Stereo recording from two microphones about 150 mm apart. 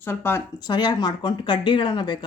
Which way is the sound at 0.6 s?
30° left (ahead or behind).